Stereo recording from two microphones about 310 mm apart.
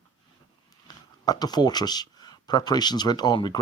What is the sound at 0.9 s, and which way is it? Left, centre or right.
Speech, centre.